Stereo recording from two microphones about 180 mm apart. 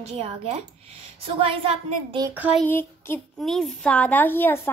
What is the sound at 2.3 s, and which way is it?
Child singing, 10° right (ahead or behind).